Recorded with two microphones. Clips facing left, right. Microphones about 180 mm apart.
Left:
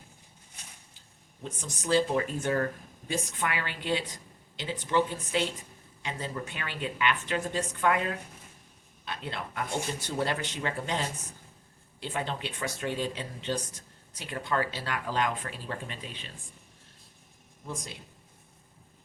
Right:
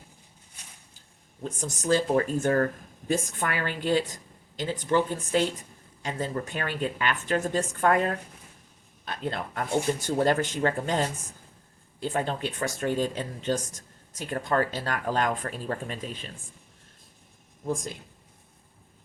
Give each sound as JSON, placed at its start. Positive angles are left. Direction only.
{"t": 1.5, "sound": "speech", "side_deg": -45}
{"t": 17.7, "sound": "speech", "side_deg": -50}